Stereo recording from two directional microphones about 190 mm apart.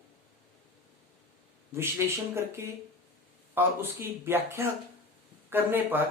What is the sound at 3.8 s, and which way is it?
Speech, 10° right (ahead or behind).